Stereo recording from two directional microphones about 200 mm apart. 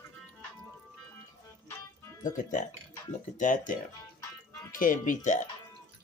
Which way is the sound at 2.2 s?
40° left (ahead or behind).